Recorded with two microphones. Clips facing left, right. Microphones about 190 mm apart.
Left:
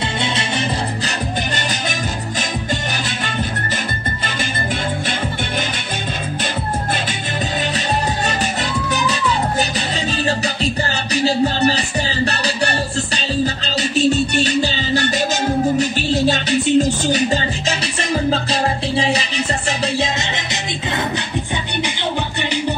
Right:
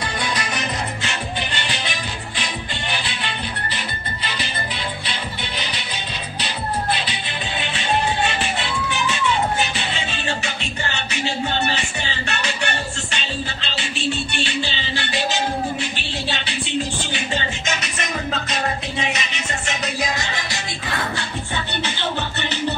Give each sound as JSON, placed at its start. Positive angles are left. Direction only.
{"t": 0.2, "sound": "music", "side_deg": 25}
{"t": 1.0, "sound": "music", "side_deg": 45}
{"t": 8.9, "sound": "music", "side_deg": 40}
{"t": 11.1, "sound": "music", "side_deg": 35}